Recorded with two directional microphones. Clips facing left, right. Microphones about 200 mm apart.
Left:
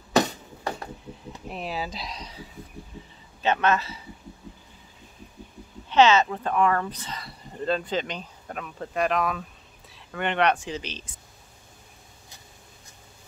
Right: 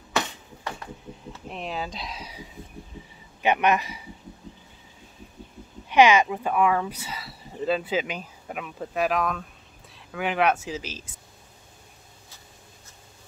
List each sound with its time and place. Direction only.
0.1 s a sound: 35° left (ahead or behind)
1.5 s speech: 5° left (ahead or behind); by 4.1 s 15° right (ahead or behind)
5.9 s speech: 10° right (ahead or behind)